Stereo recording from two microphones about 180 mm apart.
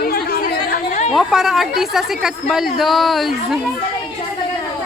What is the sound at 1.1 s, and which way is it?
A woman's voice, centre (ahead or behind).